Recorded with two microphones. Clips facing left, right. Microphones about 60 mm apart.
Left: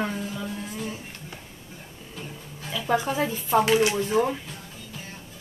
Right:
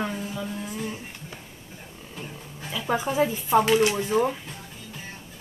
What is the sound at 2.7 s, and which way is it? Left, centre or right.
A woman's voice, centre.